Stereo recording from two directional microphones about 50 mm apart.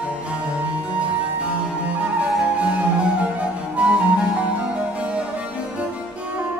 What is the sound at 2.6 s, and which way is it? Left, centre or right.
Music, right.